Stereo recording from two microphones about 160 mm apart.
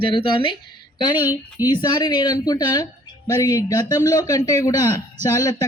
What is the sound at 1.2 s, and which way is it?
Speech, 15° right (ahead or behind).